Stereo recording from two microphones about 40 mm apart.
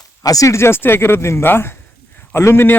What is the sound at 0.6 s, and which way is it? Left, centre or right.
Speech, left.